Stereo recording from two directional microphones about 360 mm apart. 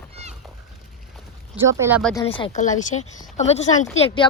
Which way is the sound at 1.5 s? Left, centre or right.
Centre.